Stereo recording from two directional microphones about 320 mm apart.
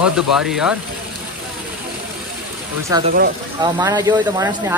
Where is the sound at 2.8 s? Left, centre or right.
Centre.